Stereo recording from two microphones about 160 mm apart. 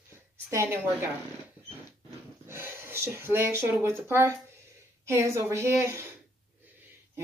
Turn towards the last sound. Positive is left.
turn(degrees=-15)  # may be behind; listen again after turning